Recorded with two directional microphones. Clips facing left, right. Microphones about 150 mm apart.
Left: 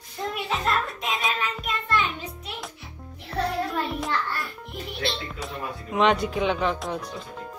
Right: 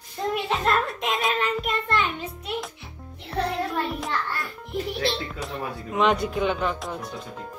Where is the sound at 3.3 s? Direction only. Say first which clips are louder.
Even; centre (ahead or behind).